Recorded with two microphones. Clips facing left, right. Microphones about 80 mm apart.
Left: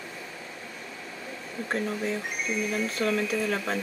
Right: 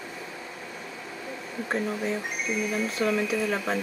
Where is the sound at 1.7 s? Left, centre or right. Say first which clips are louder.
Right 1 dB; centre.